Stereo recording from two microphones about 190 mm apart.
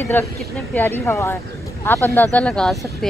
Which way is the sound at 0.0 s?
15° left (ahead or behind).